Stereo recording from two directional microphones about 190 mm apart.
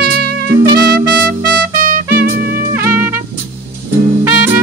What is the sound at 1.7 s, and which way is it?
Music, 45° right (ahead or behind).